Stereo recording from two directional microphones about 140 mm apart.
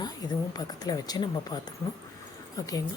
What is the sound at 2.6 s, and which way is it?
Speech, 25° left (ahead or behind).